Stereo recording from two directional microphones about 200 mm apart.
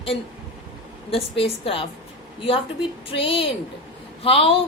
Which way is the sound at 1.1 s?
30° left (ahead or behind).